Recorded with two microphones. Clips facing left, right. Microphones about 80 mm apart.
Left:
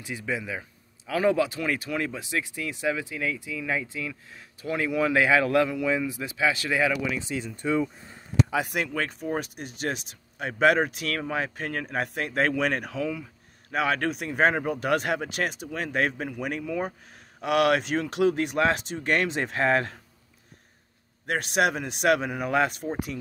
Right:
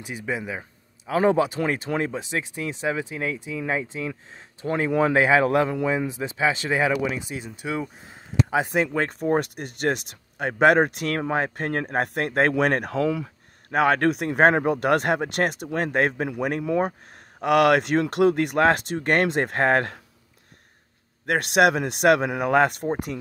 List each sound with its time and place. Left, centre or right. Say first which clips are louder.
0.0 s speech: right 2 dB; right
7.2 s speech: left 1 dB; centre
8.5 s speech: right 5 dB; right
9.1 s speech: right 7 dB; right
13.7 s speech: right 6 dB; right
21.3 s speech: right 5 dB; right